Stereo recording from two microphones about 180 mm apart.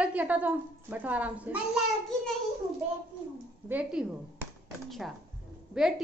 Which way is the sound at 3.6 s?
10° right (ahead or behind).